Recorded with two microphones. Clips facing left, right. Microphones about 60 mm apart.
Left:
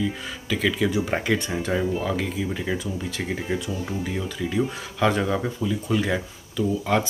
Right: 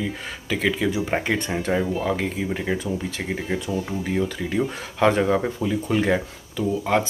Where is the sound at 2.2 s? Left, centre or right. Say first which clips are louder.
Right 2 dB; right.